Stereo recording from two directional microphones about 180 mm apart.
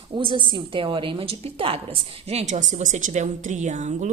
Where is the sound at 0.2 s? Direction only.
25° right (ahead or behind).